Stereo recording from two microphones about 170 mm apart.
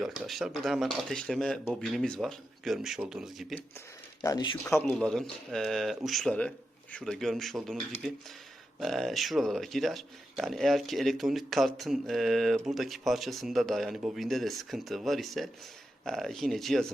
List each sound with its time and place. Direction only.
0.0 s speech: centre (ahead or behind)
4.2 s speech: 20° left (ahead or behind)
4.9 s speech: 5° left (ahead or behind)